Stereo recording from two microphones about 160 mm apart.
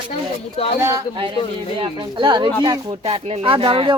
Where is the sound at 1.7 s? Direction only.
30° right (ahead or behind).